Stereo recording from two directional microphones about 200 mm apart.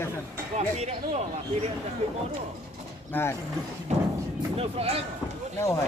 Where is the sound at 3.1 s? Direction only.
10° left (ahead or behind).